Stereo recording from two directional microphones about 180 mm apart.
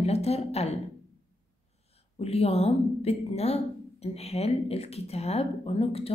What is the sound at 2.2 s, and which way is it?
A woman's voice, 35° left (ahead or behind).